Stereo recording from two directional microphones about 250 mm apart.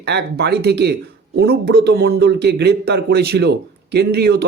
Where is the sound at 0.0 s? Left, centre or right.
Right.